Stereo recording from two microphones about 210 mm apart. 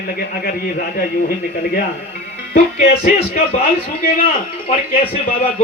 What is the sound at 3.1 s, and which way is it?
A man's voice, 40° left (ahead or behind).